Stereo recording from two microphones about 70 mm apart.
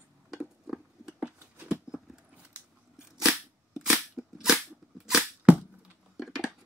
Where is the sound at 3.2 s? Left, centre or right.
Centre.